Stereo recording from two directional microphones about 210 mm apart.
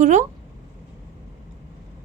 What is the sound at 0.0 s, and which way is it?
Speech, 35° right (ahead or behind).